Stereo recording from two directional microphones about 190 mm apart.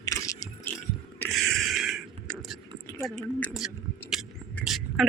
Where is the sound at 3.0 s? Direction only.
5° left (ahead or behind).